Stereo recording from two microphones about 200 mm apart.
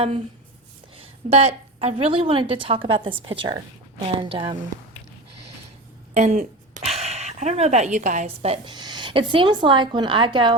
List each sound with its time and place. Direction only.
0.9 s a woman's voice: 30° right (ahead or behind)
6.1 s a woman's voice: 35° right (ahead or behind)